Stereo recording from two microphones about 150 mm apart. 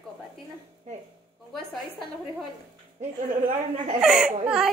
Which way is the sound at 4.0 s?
5° right (ahead or behind).